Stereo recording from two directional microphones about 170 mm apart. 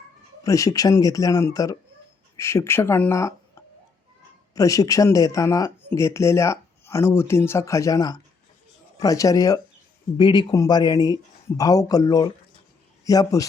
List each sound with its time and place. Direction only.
0.4 s speech: 20° left (ahead or behind)